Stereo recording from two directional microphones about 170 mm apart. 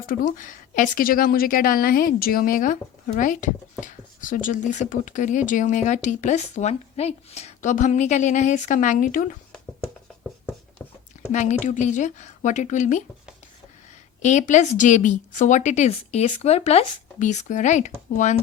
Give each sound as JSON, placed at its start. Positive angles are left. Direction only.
{"t": 0.0, "sound": "a woman's voice", "side_deg": 55}
{"t": 10.8, "sound": "a sound", "side_deg": 10}
{"t": 11.3, "sound": "a woman's voice", "side_deg": 45}
{"t": 14.2, "sound": "a woman's voice", "side_deg": 45}